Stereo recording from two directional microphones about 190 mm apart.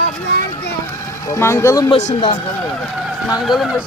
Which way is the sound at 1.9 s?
35° left (ahead or behind).